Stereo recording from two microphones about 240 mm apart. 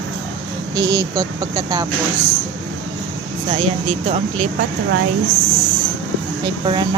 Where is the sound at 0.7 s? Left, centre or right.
Centre.